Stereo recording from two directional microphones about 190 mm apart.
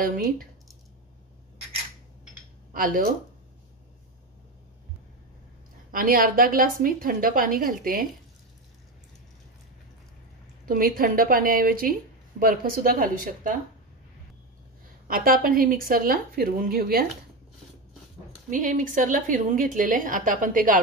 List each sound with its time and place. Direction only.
0.0 s speech: 50° right (ahead or behind)
2.7 s speech: 45° right (ahead or behind)
5.9 s speech: 45° right (ahead or behind)
10.6 s speech: 50° right (ahead or behind)
15.0 s speech: 50° right (ahead or behind)
18.5 s speech: 45° right (ahead or behind)